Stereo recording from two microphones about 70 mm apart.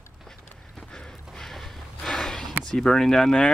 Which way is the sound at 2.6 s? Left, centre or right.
Centre.